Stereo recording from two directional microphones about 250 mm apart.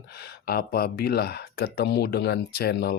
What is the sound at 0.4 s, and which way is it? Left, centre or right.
Speech, left.